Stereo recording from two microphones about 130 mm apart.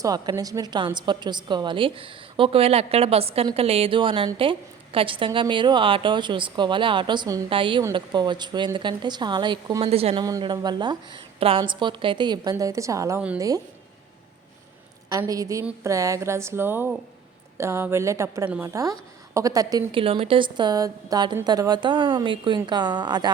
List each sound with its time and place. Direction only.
0.0 s a woman's voice: 30° right (ahead or behind)
9.9 s a woman's voice: 50° right (ahead or behind)
10.2 s a woman's voice: 30° right (ahead or behind)
15.3 s a woman's voice: 25° right (ahead or behind)
18.4 s a woman's voice: 10° right (ahead or behind)
18.7 s a woman's voice: 25° right (ahead or behind)
19.9 s a woman's voice: 45° right (ahead or behind)